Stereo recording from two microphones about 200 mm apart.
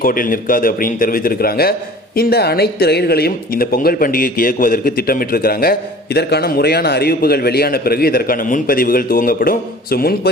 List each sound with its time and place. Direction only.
0.0 s a man's voice: 45° left (ahead or behind)